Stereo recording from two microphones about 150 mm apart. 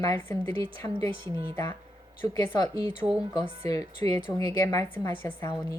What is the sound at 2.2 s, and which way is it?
Speech, 25° left (ahead or behind).